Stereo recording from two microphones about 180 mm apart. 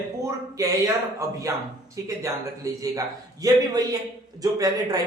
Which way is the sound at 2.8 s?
20° right (ahead or behind).